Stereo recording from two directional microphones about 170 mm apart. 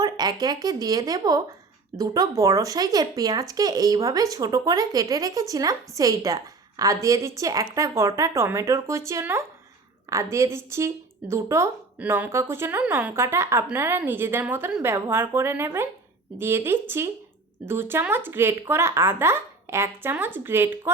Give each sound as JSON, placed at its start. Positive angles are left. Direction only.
{"t": 0.0, "sound": "speech", "side_deg": -25}